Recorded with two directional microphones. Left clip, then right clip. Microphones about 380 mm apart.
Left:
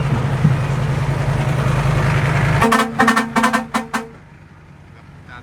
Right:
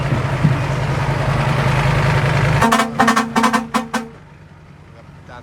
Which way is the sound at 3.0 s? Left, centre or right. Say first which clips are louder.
Even; centre.